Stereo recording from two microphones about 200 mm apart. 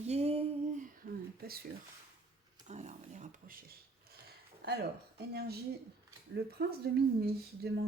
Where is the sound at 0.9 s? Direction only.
50° right (ahead or behind).